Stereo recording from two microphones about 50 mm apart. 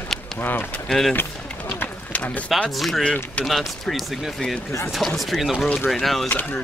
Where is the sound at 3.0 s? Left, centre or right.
Left.